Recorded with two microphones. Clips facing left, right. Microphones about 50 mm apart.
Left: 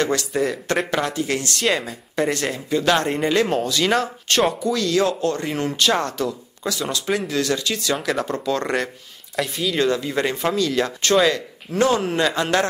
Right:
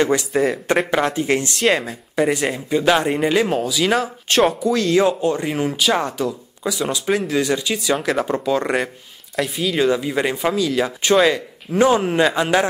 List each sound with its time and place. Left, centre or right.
0.0 s speech: centre
0.3 s speech: centre
1.1 s speech: right
1.6 s speech: centre
2.2 s speech: centre
4.9 s speech: centre